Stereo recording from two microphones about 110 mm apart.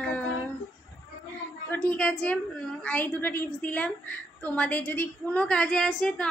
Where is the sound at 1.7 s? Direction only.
10° left (ahead or behind).